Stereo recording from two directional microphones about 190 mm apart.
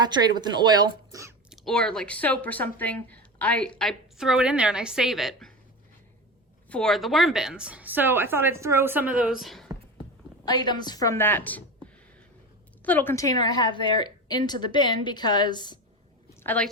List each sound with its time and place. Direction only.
0.0 s speech: 20° right (ahead or behind)
1.5 s speech: 5° left (ahead or behind)
6.7 s a woman's voice: 5° left (ahead or behind)
10.4 s a woman's voice: 20° left (ahead or behind)
12.8 s a woman's voice: 10° left (ahead or behind)
16.4 s a woman's voice: 10° left (ahead or behind)